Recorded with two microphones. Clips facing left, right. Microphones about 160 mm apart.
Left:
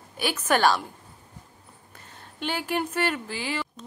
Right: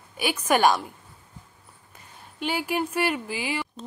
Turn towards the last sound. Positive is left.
turn(degrees=-10)  # may be behind; listen again after turning